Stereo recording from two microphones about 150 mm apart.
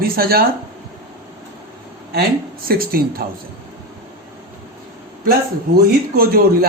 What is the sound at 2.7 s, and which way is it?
Speech, 80° right.